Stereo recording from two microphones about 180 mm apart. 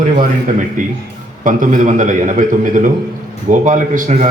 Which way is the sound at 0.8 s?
45° right (ahead or behind).